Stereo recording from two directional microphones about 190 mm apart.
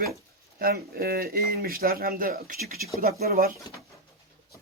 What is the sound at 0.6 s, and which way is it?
Speech, 50° right (ahead or behind).